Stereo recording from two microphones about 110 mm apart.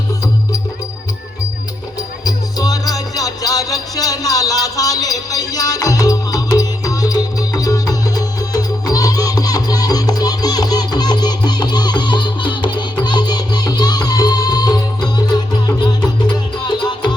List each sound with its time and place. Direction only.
2.2 s music: 35° left (ahead or behind)